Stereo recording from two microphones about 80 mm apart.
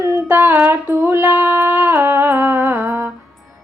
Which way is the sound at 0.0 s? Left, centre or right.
Right.